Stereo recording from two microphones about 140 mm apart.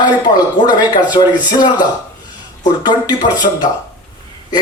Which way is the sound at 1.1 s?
30° left (ahead or behind).